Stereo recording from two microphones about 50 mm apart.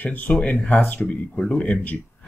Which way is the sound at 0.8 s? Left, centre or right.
Left.